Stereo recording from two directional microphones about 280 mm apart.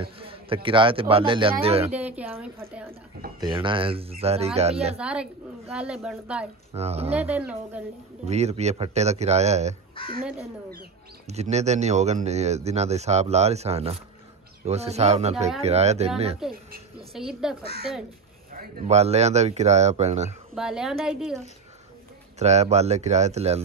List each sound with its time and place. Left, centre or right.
0.0 s speech: centre
2.0 s a woman's voice: centre
3.3 s speech: centre
4.9 s a woman's voice: centre
6.7 s speech: right
7.2 s a woman's voice: centre
8.3 s speech: right
9.9 s speech: centre
11.2 s speech: right
16.4 s a woman's voice: centre
18.5 s speech: right
20.5 s a woman's voice: centre
22.4 s speech: right